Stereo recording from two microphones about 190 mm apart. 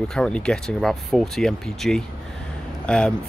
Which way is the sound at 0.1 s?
5° left (ahead or behind).